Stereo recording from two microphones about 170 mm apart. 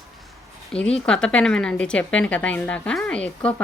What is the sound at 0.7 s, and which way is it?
Speech, 5° left (ahead or behind).